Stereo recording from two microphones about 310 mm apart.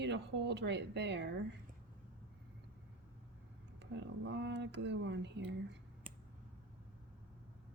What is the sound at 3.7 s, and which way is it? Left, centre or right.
Speech, right.